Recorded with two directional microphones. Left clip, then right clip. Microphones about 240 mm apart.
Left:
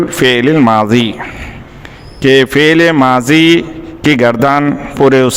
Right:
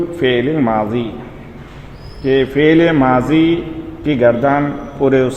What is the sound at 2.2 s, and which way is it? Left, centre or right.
A man's voice, left.